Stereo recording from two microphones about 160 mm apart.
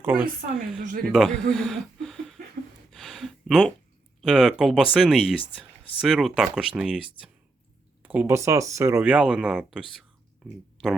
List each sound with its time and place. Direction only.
0.0 s a woman's voice: 10° right (ahead or behind)
0.8 s speech: 65° right (ahead or behind)
1.1 s speech: centre (ahead or behind)
2.9 s a sound: centre (ahead or behind)
4.2 s speech: 5° right (ahead or behind)